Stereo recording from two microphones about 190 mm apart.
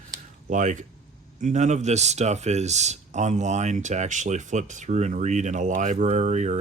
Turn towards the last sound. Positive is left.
turn(degrees=-40)  # may be behind; listen again after turning